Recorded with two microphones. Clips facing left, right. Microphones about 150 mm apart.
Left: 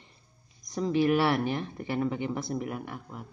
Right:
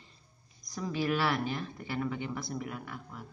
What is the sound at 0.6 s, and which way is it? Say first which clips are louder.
Speech: left 7 dB; 20° left (ahead or behind).